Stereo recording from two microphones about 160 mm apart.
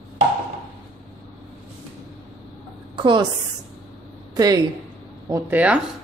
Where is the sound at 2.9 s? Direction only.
30° right (ahead or behind).